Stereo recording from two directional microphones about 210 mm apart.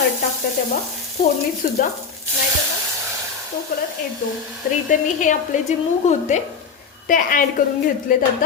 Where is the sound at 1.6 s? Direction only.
40° left (ahead or behind).